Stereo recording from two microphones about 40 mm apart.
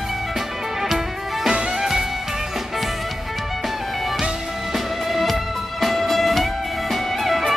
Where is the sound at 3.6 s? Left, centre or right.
Centre.